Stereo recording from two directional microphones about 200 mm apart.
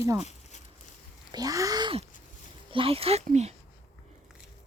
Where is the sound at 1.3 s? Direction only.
20° right (ahead or behind).